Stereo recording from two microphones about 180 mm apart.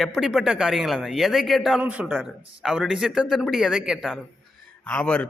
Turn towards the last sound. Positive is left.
turn(degrees=5)  # may be behind; listen again after turning